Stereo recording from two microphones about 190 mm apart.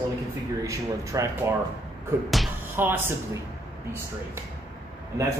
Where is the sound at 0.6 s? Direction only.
15° right (ahead or behind).